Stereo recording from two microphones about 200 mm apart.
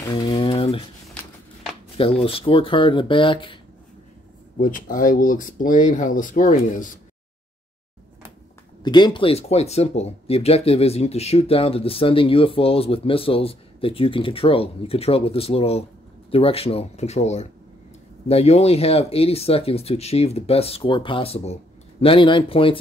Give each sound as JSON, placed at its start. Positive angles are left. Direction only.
{"t": 0.1, "sound": "a sound", "side_deg": 20}
{"t": 2.0, "sound": "speech", "side_deg": 30}
{"t": 4.6, "sound": "speech", "side_deg": 45}
{"t": 8.8, "sound": "speech", "side_deg": 20}